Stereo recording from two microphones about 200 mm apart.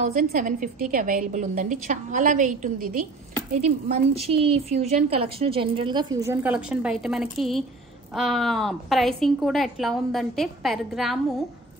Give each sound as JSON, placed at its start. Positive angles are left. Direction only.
{"t": 0.2, "sound": "a woman's voice", "side_deg": -40}
{"t": 3.9, "sound": "a woman's voice", "side_deg": -30}